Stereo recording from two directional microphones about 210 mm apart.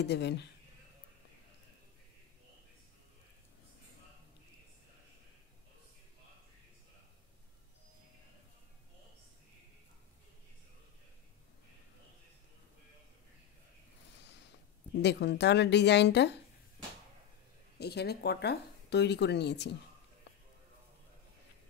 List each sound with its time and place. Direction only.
0.0 s speech: 55° left (ahead or behind)
15.0 s speech: 55° left (ahead or behind)
17.7 s speech: 50° left (ahead or behind)